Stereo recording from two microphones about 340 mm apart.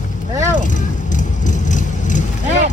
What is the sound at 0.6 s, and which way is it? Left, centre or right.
Vehicle, left.